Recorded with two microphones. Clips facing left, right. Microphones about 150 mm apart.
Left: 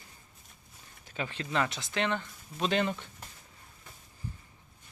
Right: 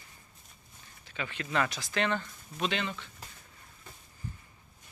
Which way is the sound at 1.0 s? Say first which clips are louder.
Left 2 dB; 35° left (ahead or behind).